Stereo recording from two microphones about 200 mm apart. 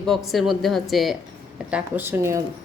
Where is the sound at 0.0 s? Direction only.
Centre (ahead or behind).